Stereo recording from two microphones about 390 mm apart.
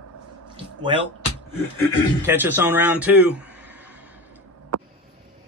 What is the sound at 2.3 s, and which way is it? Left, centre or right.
Speech, centre.